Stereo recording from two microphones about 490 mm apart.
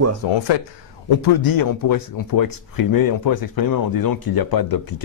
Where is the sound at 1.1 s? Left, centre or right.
Left.